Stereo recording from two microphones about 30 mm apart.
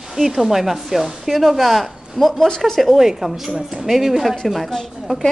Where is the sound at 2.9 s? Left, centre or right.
Centre.